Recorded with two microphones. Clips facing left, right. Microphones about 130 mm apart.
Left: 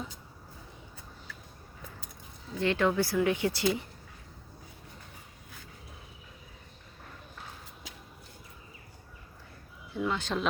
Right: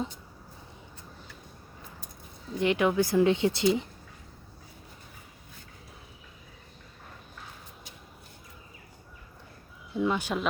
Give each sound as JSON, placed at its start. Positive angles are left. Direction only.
{"t": 2.6, "sound": "speech", "side_deg": -15}
{"t": 9.9, "sound": "speech", "side_deg": -15}